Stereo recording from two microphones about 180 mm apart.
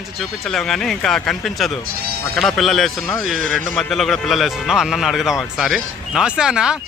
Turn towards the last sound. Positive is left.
turn(degrees=-5)  # may be behind; listen again after turning